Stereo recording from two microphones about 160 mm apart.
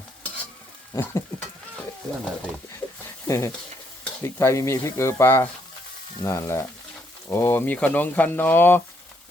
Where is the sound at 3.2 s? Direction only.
20° left (ahead or behind).